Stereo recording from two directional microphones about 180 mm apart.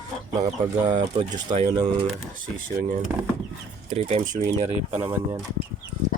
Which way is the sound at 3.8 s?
35° right (ahead or behind).